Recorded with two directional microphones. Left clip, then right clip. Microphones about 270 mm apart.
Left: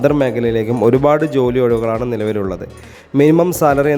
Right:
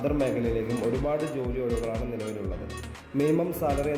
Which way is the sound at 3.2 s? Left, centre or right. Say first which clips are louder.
Left 14 dB; left.